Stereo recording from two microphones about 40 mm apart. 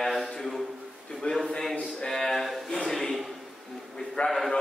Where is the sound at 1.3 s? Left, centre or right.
Left.